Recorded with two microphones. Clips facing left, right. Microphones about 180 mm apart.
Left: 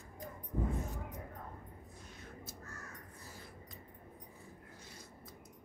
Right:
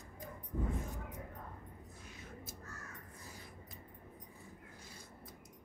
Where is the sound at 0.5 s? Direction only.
40° left (ahead or behind).